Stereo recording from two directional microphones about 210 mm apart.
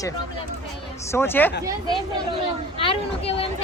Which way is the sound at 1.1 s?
10° left (ahead or behind).